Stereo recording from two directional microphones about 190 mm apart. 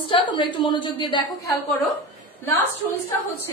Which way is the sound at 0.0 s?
25° left (ahead or behind).